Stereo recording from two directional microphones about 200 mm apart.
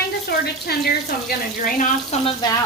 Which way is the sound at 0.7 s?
50° left (ahead or behind).